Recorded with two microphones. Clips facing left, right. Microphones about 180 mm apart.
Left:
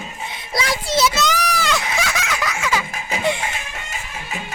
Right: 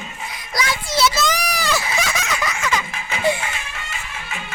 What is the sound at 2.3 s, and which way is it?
Baby laughter, 5° left (ahead or behind).